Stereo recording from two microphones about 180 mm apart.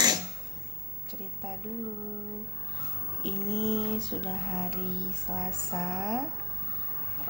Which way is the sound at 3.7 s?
5° left (ahead or behind).